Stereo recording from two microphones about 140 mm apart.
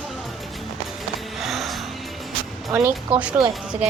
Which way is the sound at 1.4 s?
Centre (ahead or behind).